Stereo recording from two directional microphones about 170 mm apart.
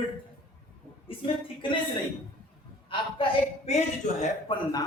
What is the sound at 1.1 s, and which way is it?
Speech, 30° left (ahead or behind).